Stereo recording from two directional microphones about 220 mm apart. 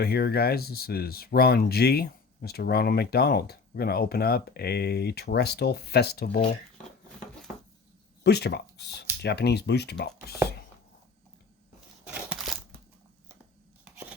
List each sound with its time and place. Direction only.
0.0 s speech: 45° left (ahead or behind)
8.2 s speech: 50° left (ahead or behind)
12.1 s a sound: 5° right (ahead or behind)